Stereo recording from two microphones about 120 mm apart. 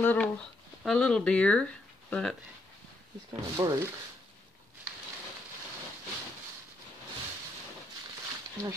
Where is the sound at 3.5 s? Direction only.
25° right (ahead or behind).